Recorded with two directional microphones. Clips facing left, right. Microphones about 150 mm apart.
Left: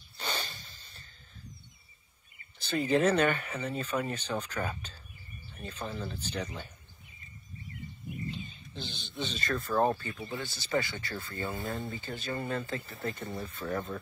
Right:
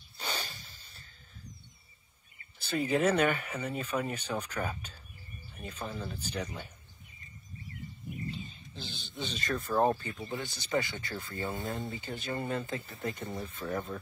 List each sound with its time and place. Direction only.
0.2 s a sound: 10° right (ahead or behind)
2.6 s speech: 10° right (ahead or behind)
8.7 s speech: 10° right (ahead or behind)
13.6 s speech: centre (ahead or behind)